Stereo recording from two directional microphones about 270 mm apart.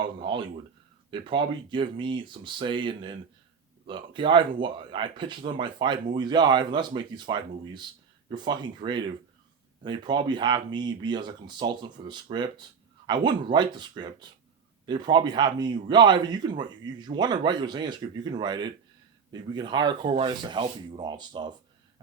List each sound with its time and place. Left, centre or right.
0.0 s speech: centre